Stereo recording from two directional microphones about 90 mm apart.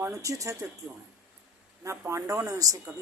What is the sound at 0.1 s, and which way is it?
Speech, 40° right (ahead or behind).